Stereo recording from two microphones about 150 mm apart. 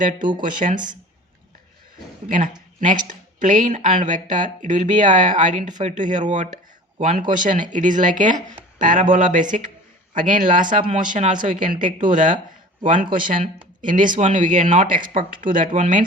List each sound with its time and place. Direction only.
0.2 s speech: 30° right (ahead or behind)
0.4 s speech: 60° right (ahead or behind)
2.8 s speech: 60° right (ahead or behind)